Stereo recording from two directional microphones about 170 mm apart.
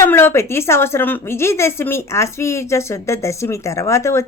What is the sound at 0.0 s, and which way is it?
A woman's voice, 15° left (ahead or behind).